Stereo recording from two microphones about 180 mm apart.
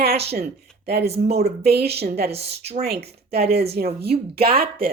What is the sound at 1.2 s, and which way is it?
Speech, 35° right (ahead or behind).